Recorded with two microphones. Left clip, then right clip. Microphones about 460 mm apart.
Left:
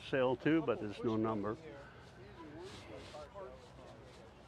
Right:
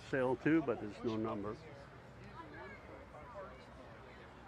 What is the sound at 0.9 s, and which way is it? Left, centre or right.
Speech, left.